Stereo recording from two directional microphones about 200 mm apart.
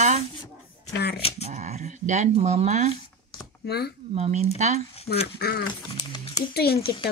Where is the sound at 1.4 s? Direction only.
35° right (ahead or behind).